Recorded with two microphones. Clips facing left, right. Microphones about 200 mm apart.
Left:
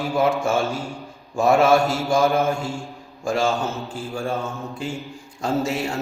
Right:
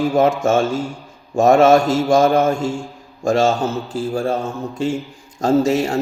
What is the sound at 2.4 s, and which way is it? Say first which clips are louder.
Mantra: right 5 dB; 90° right.